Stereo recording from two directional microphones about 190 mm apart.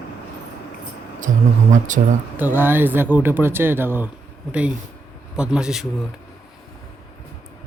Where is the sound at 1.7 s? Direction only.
40° right (ahead or behind).